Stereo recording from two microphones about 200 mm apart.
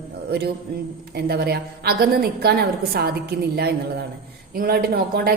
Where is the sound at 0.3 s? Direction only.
50° right (ahead or behind).